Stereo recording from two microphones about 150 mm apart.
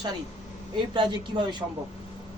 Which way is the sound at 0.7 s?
30° right (ahead or behind).